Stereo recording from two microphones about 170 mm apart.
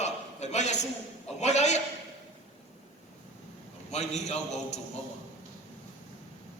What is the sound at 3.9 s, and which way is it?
Speech, 40° left (ahead or behind).